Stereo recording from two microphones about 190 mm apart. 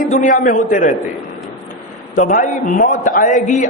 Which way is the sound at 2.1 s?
45° left (ahead or behind).